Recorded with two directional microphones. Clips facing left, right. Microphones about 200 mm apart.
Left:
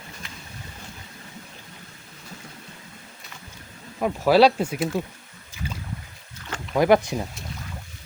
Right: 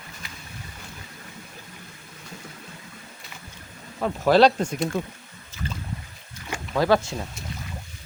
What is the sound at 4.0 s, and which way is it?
Speech, 10° left (ahead or behind).